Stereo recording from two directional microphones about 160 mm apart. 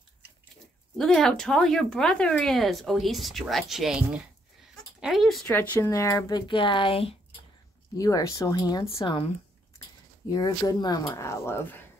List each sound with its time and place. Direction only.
0.9 s speech: 5° left (ahead or behind)
5.5 s speech: 10° left (ahead or behind); by 7.2 s 35° left (ahead or behind)
8.0 s speech: 20° left (ahead or behind)
10.3 s speech: 20° left (ahead or behind)